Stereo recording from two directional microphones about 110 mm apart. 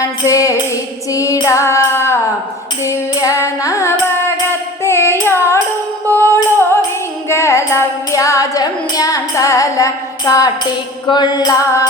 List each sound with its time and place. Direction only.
0.0 s music: 30° left (ahead or behind)
1.1 s female singing: 30° left (ahead or behind)
2.8 s music: 30° left (ahead or behind)
4.8 s carnatic music: 25° left (ahead or behind)
6.1 s music: 20° left (ahead or behind); by 11.5 s 40° left (ahead or behind)